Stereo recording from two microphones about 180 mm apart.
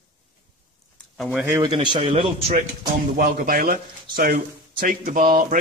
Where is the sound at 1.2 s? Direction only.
5° right (ahead or behind).